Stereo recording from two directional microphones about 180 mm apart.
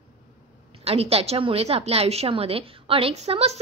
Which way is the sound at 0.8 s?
35° right (ahead or behind).